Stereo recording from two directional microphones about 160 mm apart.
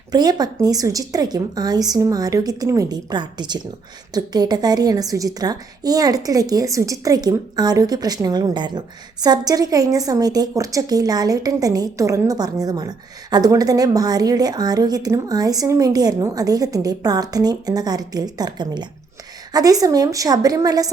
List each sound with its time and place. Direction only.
0.1 s a woman's voice: 25° right (ahead or behind)